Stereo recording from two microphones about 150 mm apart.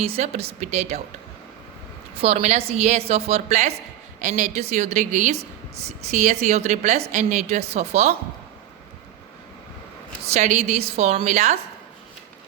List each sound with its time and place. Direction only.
0.0 s speech: 45° right (ahead or behind)
2.1 s speech: 45° right (ahead or behind)
10.2 s speech: 50° right (ahead or behind)